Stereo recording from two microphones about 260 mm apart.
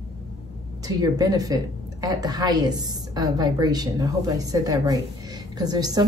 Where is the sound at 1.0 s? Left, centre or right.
Centre.